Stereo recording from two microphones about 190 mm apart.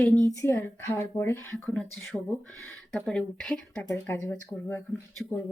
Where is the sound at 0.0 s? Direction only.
10° left (ahead or behind).